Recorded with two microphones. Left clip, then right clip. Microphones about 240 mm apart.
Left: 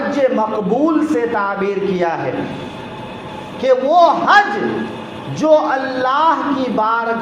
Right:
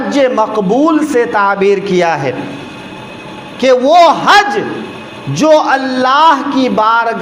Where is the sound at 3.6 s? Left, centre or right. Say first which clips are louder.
Right 5 dB; right.